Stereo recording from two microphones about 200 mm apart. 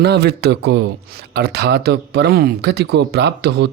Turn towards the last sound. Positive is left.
turn(degrees=-60)  # may be behind; listen again after turning